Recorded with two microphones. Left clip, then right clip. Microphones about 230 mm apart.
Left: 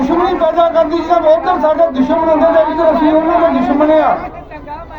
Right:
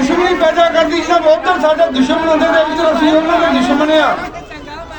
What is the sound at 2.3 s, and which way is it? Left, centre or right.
A man's voice, right.